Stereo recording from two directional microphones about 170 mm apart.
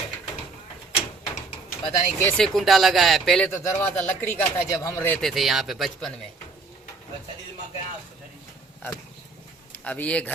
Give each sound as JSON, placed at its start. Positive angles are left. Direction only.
{"t": 1.8, "sound": "speech", "side_deg": 15}
{"t": 2.4, "sound": "speech", "side_deg": 0}
{"t": 9.7, "sound": "speech", "side_deg": 10}